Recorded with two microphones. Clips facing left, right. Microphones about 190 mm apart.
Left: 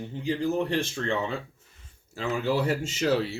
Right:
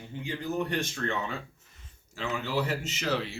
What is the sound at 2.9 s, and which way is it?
Speech, 40° left (ahead or behind).